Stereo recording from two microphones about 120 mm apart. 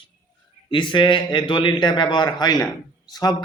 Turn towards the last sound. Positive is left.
turn(degrees=35)  # may be behind; listen again after turning